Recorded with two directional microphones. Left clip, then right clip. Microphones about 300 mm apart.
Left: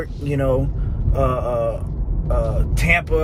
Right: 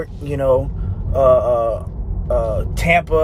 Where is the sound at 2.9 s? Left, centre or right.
Centre.